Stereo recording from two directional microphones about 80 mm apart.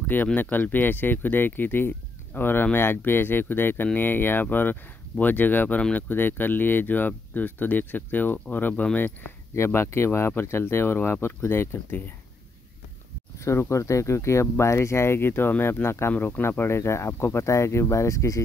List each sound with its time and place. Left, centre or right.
0.0 s speech: left
9.6 s speech: left
13.4 s speech: left